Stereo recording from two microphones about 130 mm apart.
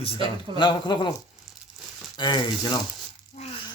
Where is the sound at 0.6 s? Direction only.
35° left (ahead or behind).